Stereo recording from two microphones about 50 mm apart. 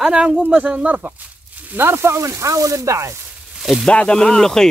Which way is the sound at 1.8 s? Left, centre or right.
Right.